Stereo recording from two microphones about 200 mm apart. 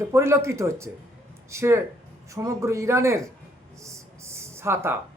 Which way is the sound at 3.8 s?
15° right (ahead or behind).